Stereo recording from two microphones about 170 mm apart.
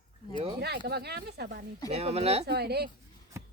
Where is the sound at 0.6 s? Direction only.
75° right (ahead or behind).